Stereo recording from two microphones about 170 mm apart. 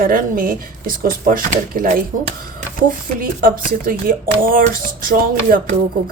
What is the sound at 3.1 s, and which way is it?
Speech, 55° right (ahead or behind).